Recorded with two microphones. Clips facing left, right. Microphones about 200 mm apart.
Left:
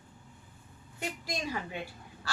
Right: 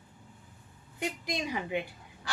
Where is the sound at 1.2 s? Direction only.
15° right (ahead or behind).